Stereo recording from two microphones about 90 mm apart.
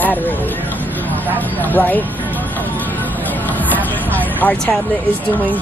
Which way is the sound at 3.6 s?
20° left (ahead or behind).